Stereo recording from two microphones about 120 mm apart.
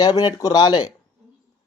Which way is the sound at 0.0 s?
35° left (ahead or behind).